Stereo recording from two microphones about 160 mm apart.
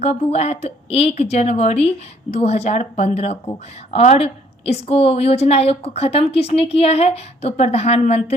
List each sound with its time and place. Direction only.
0.0 s a woman's voice: 40° left (ahead or behind)